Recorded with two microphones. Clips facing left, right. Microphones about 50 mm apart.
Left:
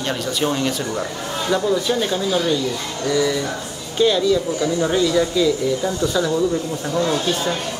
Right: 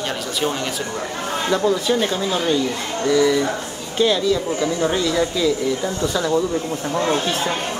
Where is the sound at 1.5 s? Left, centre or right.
Centre.